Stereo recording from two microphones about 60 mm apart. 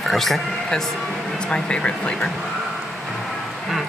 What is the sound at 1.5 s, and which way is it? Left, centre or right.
Speech, centre.